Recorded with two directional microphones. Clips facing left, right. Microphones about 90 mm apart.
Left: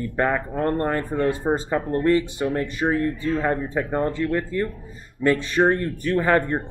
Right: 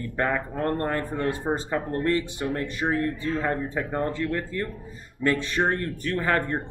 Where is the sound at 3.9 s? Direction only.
25° left (ahead or behind).